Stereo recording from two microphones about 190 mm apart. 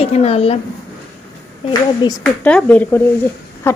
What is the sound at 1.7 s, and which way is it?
Speech, 20° left (ahead or behind).